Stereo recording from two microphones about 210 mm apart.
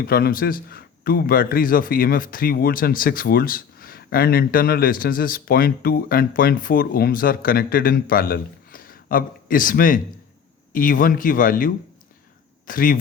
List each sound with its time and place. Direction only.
0.0 s a man's voice: 45° left (ahead or behind)